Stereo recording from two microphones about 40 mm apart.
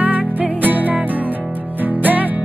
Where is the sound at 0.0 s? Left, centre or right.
Right.